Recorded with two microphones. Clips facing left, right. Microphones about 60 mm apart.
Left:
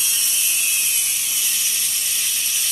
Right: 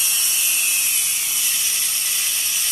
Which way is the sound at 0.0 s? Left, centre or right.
Right.